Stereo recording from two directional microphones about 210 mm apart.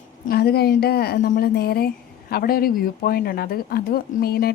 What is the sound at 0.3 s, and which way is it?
A woman's voice, 50° left (ahead or behind).